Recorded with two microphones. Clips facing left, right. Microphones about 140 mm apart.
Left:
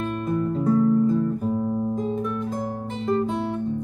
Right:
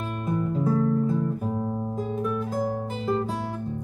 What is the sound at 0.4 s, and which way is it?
Music, 5° right (ahead or behind).